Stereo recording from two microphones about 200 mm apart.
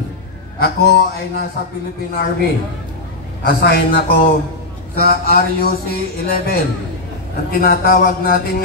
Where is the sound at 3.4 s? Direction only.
50° left (ahead or behind).